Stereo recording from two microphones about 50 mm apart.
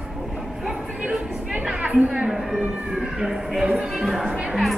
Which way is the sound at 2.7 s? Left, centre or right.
Centre.